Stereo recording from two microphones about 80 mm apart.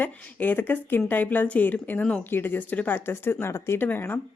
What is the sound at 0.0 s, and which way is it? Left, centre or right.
A woman's voice, left.